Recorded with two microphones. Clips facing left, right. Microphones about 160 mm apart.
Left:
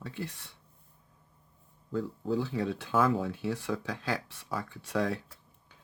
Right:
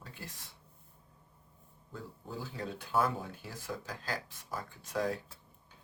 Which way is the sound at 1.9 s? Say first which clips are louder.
Left 13 dB; 85° left.